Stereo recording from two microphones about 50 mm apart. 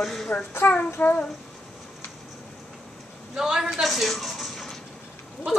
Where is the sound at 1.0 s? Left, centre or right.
Left.